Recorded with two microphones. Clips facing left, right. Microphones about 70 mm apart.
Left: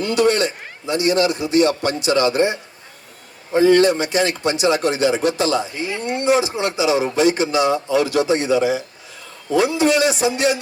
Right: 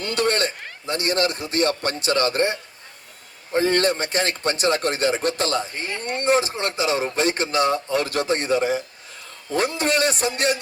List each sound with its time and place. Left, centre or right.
0.0 s a man's voice: right
3.6 s speech: right